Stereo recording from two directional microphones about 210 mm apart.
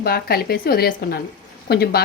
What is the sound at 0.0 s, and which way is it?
Speech, 45° left (ahead or behind).